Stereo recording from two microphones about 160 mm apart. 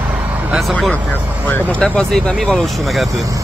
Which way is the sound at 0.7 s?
5° left (ahead or behind).